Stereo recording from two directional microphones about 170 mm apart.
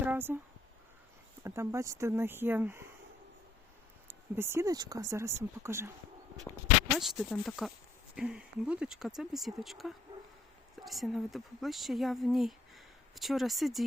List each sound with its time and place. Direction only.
0.0 s a sound: 10° right (ahead or behind)
1.5 s speech: 15° right (ahead or behind)
4.1 s speech: 15° right (ahead or behind)
6.5 s speech: 15° left (ahead or behind)
6.9 s speech: centre (ahead or behind)